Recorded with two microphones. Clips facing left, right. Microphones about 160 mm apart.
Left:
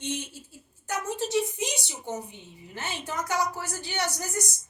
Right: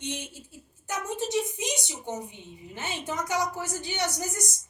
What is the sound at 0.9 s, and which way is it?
A woman's voice, 20° right (ahead or behind).